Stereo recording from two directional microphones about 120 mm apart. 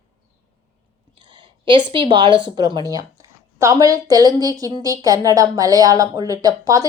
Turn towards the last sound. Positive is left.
turn(degrees=-30)  # may be behind; listen again after turning